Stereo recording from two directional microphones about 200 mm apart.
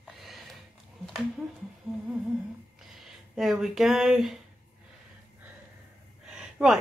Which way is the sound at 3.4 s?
Centre (ahead or behind).